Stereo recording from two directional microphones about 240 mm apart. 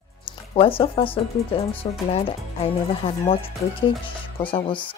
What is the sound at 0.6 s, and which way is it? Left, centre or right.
Speech, left.